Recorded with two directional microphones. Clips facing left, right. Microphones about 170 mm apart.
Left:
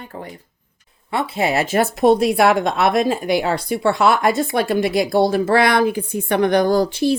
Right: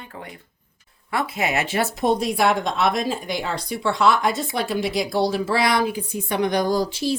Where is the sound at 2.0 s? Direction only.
65° left (ahead or behind).